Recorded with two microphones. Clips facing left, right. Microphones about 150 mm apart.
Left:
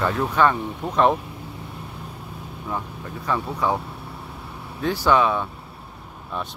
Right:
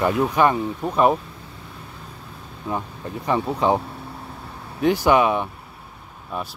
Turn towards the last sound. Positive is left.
turn(degrees=-10)  # may be behind; listen again after turning